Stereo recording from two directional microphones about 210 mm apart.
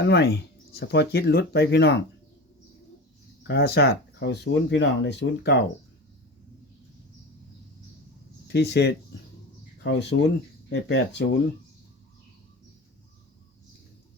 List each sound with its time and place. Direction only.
0.0 s speech: 50° left (ahead or behind)
3.4 s speech: 50° left (ahead or behind)
8.5 s speech: 55° left (ahead or behind)